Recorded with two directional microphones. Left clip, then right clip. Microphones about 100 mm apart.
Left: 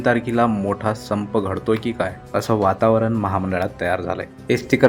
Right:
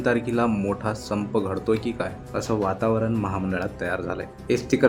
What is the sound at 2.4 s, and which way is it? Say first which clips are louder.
Speech: left 7 dB; 55° left (ahead or behind).